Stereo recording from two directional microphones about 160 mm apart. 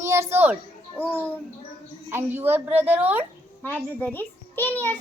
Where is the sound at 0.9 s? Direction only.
10° left (ahead or behind).